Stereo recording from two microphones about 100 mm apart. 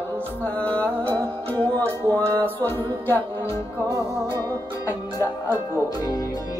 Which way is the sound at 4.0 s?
30° left (ahead or behind).